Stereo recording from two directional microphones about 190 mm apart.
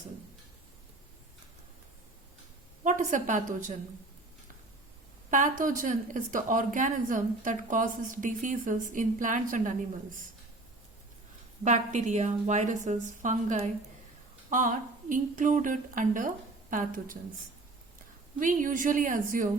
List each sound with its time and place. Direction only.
2.8 s a woman's voice: 40° right (ahead or behind)
5.3 s a woman's voice: 45° right (ahead or behind)
11.6 s a woman's voice: 40° right (ahead or behind)
18.3 s a woman's voice: 45° right (ahead or behind)